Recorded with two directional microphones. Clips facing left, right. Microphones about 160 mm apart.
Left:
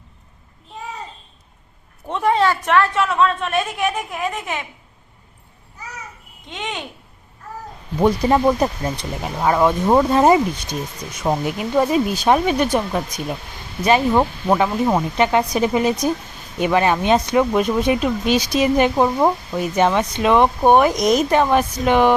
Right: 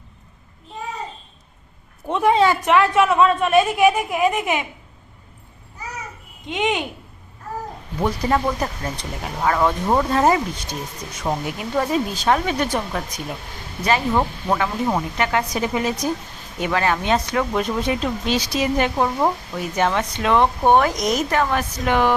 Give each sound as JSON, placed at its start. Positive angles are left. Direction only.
{"t": 2.0, "sound": "a woman's voice", "side_deg": -15}
{"t": 6.5, "sound": "a woman's voice", "side_deg": -15}
{"t": 8.0, "sound": "speech", "side_deg": 20}